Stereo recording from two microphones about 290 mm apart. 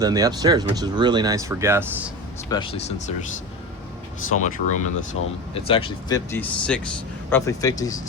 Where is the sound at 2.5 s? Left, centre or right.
Centre.